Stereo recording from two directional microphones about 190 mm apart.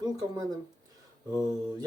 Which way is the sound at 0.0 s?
20° right (ahead or behind).